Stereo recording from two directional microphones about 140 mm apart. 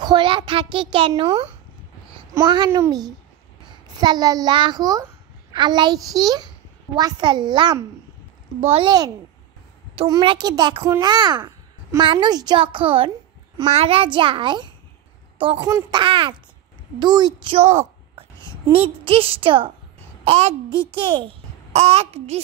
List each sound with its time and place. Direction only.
0.0 s a child's voice: 35° right (ahead or behind)
8.5 s a child's voice: 45° right (ahead or behind)
9.9 s a child's voice: 35° right (ahead or behind)
17.6 s a sound: 50° right (ahead or behind)
18.4 s a woman's voice: 40° right (ahead or behind)
20.2 s a child's voice: 50° right (ahead or behind)
20.9 s a child's voice: 35° right (ahead or behind)